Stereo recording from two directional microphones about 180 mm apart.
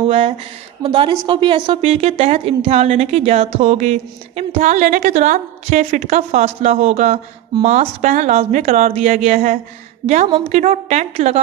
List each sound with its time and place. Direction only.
0.0 s a woman's voice: 30° right (ahead or behind)